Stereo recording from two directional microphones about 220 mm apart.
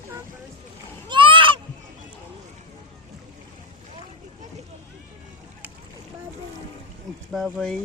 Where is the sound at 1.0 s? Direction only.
20° right (ahead or behind).